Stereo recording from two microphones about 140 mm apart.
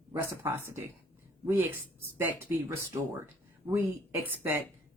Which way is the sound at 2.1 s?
15° right (ahead or behind).